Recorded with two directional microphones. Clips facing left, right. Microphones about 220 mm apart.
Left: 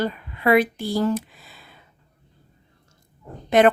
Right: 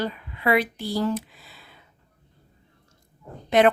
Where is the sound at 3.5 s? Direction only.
50° left (ahead or behind).